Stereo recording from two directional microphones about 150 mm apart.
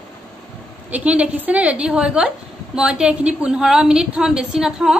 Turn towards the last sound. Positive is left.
turn(degrees=-5)  # may be behind; listen again after turning